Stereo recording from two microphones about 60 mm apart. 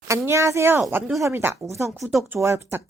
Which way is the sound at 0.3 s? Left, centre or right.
Right.